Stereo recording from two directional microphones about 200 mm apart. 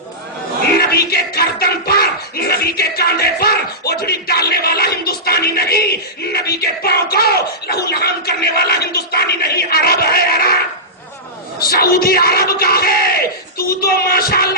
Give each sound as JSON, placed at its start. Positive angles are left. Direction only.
{"t": 0.8, "sound": "music", "side_deg": 50}
{"t": 6.3, "sound": "a sound", "side_deg": 50}
{"t": 11.7, "sound": "crowd", "side_deg": 50}
{"t": 13.8, "sound": "music", "side_deg": 50}